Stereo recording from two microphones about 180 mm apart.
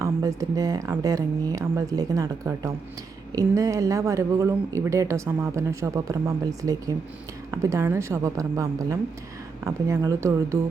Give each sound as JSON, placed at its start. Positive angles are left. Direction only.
{"t": 0.0, "sound": "speech", "side_deg": -20}